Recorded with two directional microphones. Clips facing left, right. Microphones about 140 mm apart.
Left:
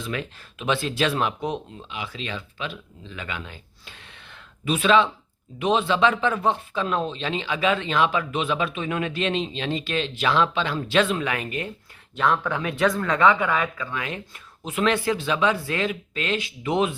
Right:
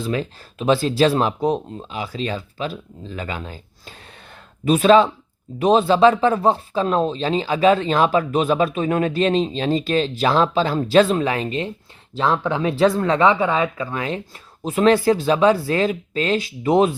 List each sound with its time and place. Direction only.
0.0 s speech: 35° right (ahead or behind)